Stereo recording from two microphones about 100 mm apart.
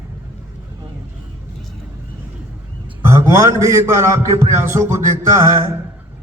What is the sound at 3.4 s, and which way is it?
A man's voice, 30° right (ahead or behind).